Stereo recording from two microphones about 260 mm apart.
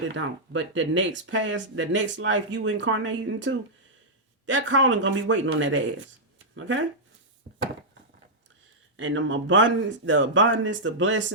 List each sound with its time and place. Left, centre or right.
0.1 s speech: right
9.0 s speech: right